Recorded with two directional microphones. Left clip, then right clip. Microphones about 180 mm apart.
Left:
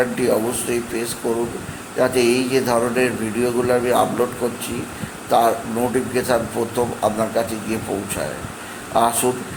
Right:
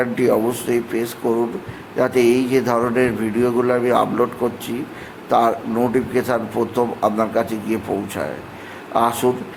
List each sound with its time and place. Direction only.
0.0 s a man's voice: 25° right (ahead or behind)
5.3 s a man's voice: 20° right (ahead or behind)
8.9 s a man's voice: 20° right (ahead or behind)